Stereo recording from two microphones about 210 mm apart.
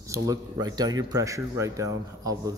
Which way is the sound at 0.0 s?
15° right (ahead or behind).